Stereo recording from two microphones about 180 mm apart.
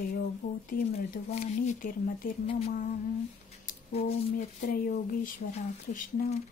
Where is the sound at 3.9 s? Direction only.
35° left (ahead or behind).